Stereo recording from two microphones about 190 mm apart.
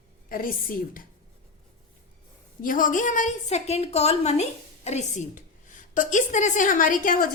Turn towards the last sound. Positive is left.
turn(degrees=45)  # may be behind; listen again after turning